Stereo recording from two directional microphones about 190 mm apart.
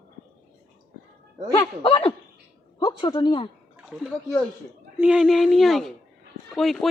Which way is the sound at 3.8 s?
Centre (ahead or behind).